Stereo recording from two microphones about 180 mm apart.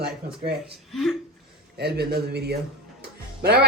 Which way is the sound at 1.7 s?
65° right (ahead or behind).